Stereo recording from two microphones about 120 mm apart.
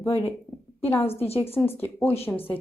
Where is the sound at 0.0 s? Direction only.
20° left (ahead or behind).